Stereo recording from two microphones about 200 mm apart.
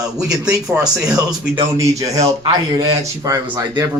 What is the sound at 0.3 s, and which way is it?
Speech, 5° right (ahead or behind).